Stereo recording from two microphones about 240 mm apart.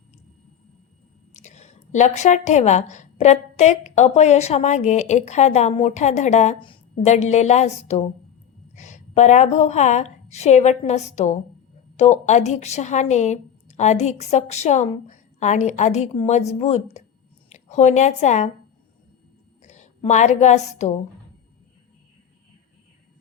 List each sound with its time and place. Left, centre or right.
1.3 s a woman's voice: left
19.6 s a woman's voice: left